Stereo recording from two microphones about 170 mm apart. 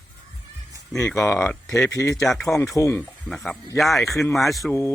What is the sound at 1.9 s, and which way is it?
Speech, 20° left (ahead or behind).